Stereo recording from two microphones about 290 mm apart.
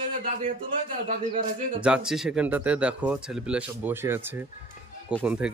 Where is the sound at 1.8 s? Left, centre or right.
Centre.